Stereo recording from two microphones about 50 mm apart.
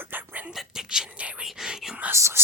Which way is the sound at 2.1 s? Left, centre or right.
Right.